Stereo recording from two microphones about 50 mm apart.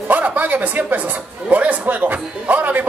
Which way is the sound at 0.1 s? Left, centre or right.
Right.